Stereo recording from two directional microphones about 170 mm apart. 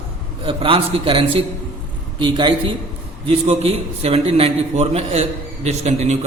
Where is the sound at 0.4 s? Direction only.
30° right (ahead or behind).